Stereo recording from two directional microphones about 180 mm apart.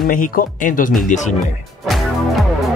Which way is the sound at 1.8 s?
Centre (ahead or behind).